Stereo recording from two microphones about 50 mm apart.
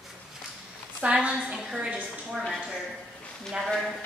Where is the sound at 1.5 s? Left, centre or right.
Centre.